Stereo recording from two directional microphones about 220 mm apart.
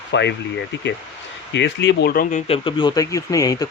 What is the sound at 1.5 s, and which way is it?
Speech, 55° left (ahead or behind).